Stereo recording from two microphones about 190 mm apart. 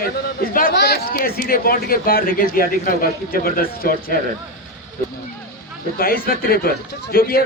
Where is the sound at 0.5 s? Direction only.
55° left (ahead or behind).